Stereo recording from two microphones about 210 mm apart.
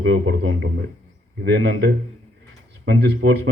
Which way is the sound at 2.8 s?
60° right (ahead or behind).